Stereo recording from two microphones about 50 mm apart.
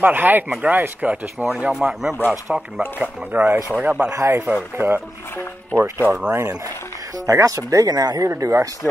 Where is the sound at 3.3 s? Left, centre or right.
Right.